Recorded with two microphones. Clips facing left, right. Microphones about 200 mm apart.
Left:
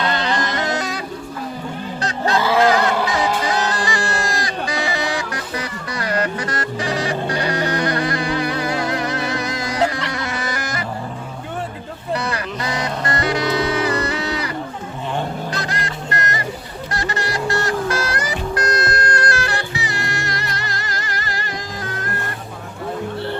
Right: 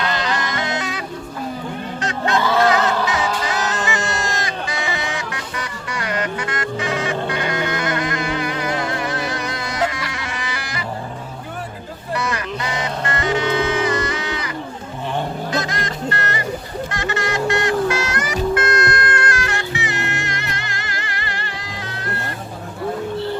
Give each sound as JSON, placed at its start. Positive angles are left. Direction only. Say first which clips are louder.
{"t": 0.0, "sound": "music", "louder": "left 2 dB", "side_deg": 35}
{"t": 12.1, "sound": "music", "louder": "even", "side_deg": 35}
{"t": 15.5, "sound": "music", "louder": "right 3 dB", "side_deg": 35}
{"t": 16.9, "sound": "music", "louder": "even", "side_deg": 35}